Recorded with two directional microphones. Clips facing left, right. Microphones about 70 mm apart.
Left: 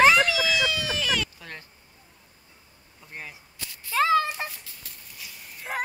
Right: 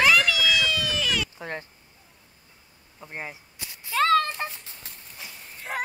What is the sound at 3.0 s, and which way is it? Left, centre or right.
Cap gun, right.